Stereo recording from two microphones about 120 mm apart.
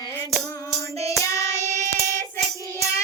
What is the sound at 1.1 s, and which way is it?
Child singing, 25° left (ahead or behind).